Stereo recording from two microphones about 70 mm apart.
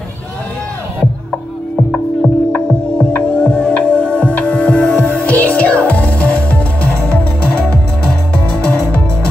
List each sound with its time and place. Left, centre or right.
1.8 s music: centre
5.0 s music: left